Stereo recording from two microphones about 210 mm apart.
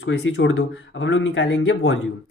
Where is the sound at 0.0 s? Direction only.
60° left (ahead or behind).